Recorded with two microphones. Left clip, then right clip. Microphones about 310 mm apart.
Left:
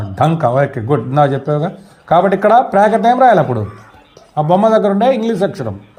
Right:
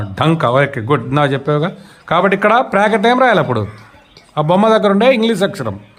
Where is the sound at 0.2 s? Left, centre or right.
Centre.